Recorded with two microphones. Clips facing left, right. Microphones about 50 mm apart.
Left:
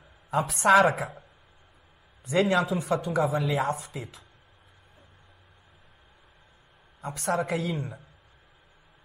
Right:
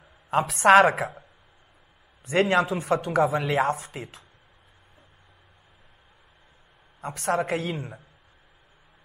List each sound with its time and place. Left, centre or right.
0.3 s a woman's voice: right
2.2 s speech: right
7.0 s speech: right